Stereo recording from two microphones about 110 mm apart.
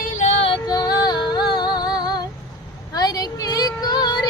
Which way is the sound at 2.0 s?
40° left (ahead or behind).